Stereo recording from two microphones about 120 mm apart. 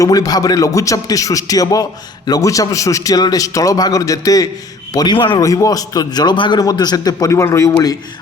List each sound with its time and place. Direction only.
0.0 s a man's voice: 30° left (ahead or behind)
5.4 s a man's voice: 30° left (ahead or behind)